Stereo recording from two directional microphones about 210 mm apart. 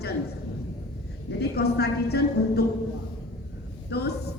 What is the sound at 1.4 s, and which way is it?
Speech, 50° left (ahead or behind).